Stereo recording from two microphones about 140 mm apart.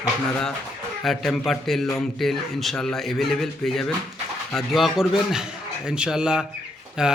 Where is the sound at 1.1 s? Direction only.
Centre (ahead or behind).